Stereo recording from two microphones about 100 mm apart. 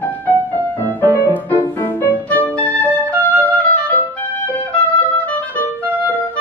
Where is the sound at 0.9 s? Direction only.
20° left (ahead or behind).